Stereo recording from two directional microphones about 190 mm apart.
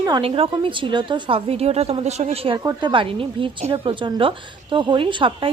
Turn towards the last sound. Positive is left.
turn(degrees=-25)  # may be behind; listen again after turning